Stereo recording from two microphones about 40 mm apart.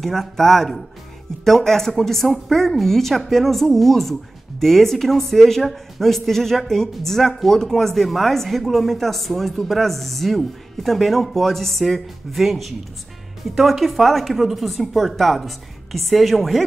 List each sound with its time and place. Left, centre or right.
0.0 s speech: centre